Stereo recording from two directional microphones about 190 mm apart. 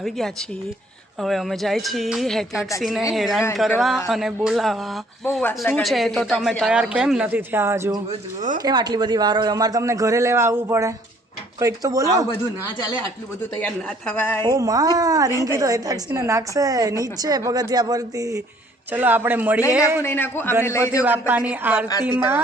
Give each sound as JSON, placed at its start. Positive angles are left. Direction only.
{"t": 1.2, "sound": "a man's voice", "side_deg": 0}
{"t": 8.4, "sound": "speech", "side_deg": -40}
{"t": 8.6, "sound": "a woman's voice", "side_deg": -20}
{"t": 13.6, "sound": "a woman's voice", "side_deg": 10}
{"t": 14.4, "sound": "a woman's voice", "side_deg": -20}
{"t": 20.0, "sound": "a woman's voice", "side_deg": 10}
{"t": 21.0, "sound": "speech", "side_deg": -10}